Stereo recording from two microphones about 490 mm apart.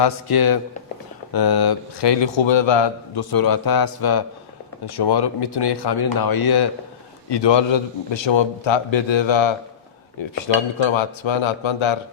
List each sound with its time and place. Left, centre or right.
0.0 s a man's voice: left